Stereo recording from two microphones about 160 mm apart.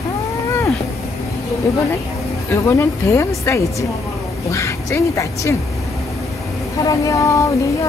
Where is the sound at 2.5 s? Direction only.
15° left (ahead or behind).